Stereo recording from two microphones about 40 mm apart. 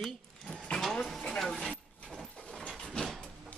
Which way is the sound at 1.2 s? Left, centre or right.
Centre.